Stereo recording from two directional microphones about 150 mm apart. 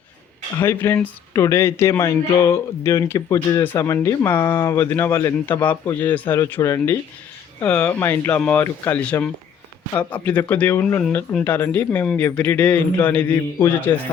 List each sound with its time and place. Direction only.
0.6 s speech: 15° left (ahead or behind)